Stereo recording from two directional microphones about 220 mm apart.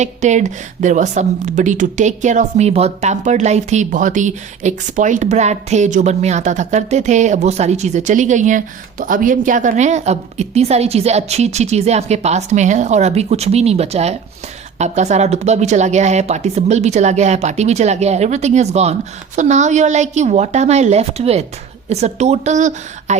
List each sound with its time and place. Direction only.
0.0 s a woman's voice: 35° right (ahead or behind)